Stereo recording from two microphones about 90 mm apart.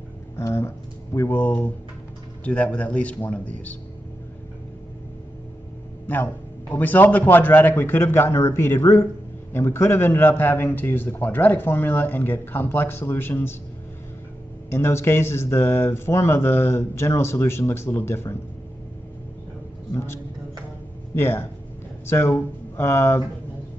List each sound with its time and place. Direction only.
0.4 s a man's voice: 30° left (ahead or behind)
6.1 s a man's voice: 20° left (ahead or behind)
14.7 s a man's voice: 30° left (ahead or behind)
21.1 s speech: 25° left (ahead or behind)